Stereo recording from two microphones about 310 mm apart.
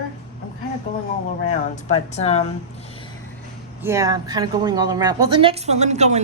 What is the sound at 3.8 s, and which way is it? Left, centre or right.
Speech, centre.